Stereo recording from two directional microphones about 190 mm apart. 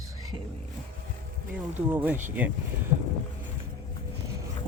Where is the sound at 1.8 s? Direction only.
10° right (ahead or behind).